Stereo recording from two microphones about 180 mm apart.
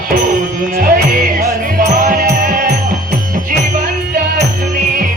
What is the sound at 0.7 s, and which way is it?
Music, 50° right (ahead or behind).